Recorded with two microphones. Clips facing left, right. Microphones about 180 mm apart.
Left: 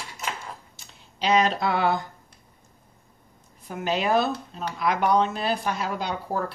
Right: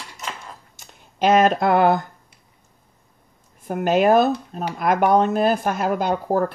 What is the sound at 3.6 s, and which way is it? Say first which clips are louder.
Speech: right 9 dB; 50° right (ahead or behind).